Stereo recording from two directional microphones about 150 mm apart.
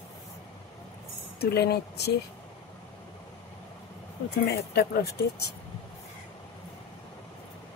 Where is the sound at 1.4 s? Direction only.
90° left.